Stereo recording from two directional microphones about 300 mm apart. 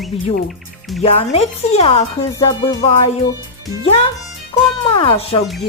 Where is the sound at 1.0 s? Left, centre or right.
Centre.